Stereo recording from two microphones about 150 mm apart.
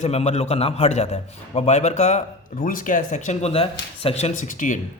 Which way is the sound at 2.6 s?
60° left (ahead or behind).